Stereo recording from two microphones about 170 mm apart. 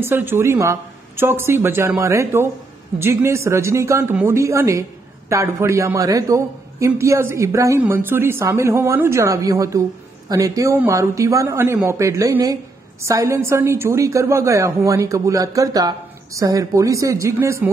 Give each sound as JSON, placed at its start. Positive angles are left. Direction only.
{"t": 0.0, "sound": "a man's voice", "side_deg": -15}